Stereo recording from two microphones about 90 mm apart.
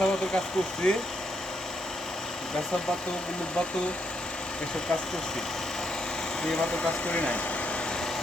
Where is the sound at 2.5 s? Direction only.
5° left (ahead or behind).